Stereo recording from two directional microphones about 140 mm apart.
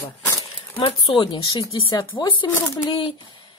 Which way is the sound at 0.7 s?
40° left (ahead or behind).